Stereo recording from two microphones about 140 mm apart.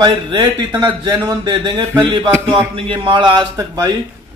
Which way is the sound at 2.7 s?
40° right (ahead or behind).